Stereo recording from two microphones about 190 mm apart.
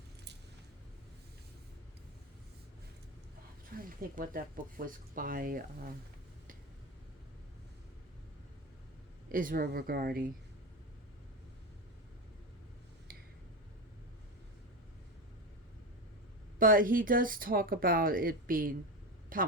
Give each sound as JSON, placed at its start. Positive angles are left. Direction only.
{"t": 3.8, "sound": "speech", "side_deg": -50}
{"t": 9.3, "sound": "speech", "side_deg": -45}
{"t": 16.6, "sound": "speech", "side_deg": -45}